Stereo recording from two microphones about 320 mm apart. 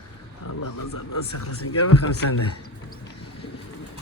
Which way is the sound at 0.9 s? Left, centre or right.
Left.